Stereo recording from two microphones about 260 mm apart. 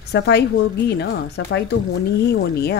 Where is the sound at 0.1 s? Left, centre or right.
Left.